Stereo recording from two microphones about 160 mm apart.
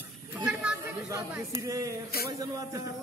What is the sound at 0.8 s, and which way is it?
Chatter, 20° right (ahead or behind).